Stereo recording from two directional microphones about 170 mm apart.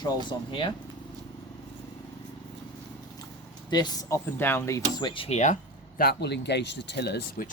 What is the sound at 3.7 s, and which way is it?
Speech, 25° left (ahead or behind).